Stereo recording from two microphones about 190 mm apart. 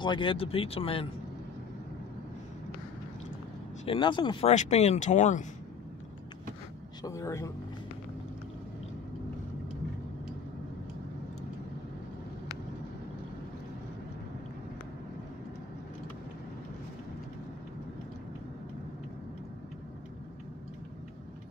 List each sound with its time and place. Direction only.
0.0 s speech: 25° left (ahead or behind)
3.8 s speech: 25° left (ahead or behind)
7.0 s speech: 15° left (ahead or behind)